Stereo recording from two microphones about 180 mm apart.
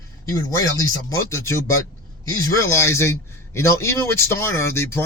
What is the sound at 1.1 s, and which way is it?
A man's voice, 15° left (ahead or behind).